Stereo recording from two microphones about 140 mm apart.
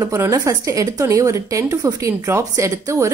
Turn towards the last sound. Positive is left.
turn(degrees=-20)  # may be behind; listen again after turning